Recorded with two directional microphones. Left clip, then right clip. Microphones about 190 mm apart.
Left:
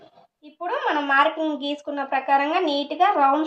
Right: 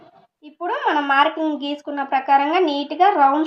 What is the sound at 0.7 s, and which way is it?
A woman's voice, 15° left (ahead or behind).